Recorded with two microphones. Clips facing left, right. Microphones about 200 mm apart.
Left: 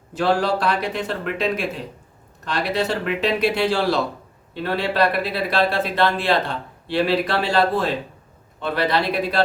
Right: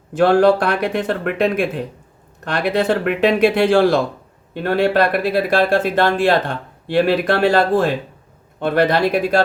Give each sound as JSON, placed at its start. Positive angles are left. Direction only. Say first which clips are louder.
{"t": 0.1, "sound": "speech", "louder": "right 8 dB", "side_deg": -55}